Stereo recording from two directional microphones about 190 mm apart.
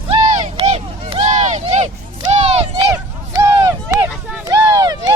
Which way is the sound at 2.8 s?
15° right (ahead or behind).